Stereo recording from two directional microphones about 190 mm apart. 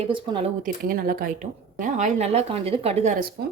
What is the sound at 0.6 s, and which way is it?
A woman's voice, 50° right (ahead or behind).